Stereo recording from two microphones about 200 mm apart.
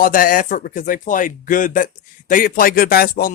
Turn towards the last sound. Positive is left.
turn(degrees=45)  # may be behind; listen again after turning